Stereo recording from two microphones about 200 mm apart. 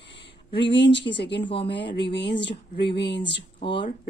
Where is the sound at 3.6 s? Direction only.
25° left (ahead or behind).